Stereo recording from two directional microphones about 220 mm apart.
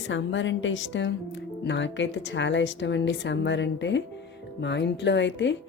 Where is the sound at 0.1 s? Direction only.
55° left (ahead or behind).